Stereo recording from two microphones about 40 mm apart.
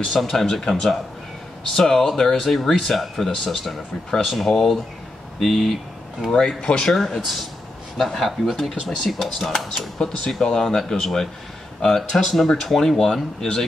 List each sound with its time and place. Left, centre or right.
0.1 s speech: centre
6.3 s speech: left
6.9 s speech: centre
9.8 s speech: centre